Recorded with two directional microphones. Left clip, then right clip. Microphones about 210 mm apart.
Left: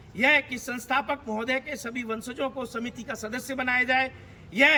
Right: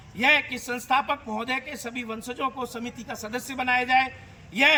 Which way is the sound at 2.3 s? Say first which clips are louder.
Right 5 dB; 25° left (ahead or behind).